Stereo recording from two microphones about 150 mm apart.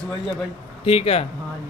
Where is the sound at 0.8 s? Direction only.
40° left (ahead or behind).